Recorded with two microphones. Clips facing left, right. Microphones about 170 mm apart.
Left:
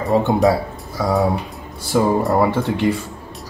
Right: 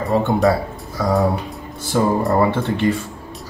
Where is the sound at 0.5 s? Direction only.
10° left (ahead or behind).